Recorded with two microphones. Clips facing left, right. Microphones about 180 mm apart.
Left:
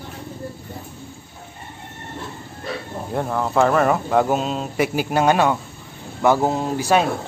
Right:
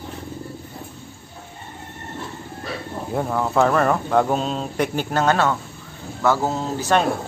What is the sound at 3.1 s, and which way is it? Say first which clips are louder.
Speech: even; centre (ahead or behind).